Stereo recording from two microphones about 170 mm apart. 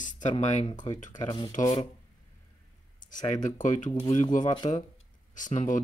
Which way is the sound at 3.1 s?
50° left (ahead or behind).